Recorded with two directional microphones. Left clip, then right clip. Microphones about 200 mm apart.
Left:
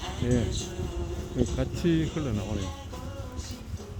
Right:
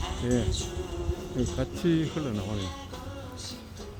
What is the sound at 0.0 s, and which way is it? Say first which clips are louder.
Music: even; 35° right (ahead or behind).